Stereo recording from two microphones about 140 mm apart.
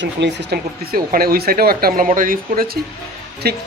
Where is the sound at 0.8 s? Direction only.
90° right.